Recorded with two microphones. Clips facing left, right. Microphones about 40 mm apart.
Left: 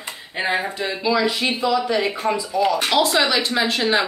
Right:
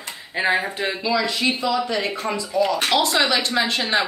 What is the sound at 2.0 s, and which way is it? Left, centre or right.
Speech, centre.